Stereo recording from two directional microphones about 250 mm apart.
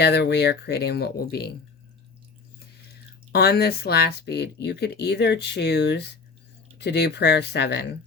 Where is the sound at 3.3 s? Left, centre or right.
Left.